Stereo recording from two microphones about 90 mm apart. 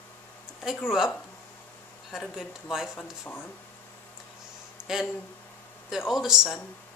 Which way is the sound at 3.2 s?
25° left (ahead or behind).